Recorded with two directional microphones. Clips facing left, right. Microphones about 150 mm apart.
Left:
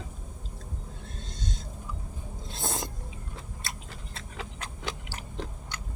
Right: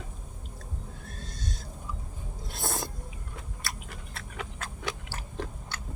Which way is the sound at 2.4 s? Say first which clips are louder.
Even; 20° left (ahead or behind).